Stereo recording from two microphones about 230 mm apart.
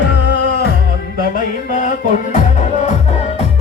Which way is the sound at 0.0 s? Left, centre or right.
Left.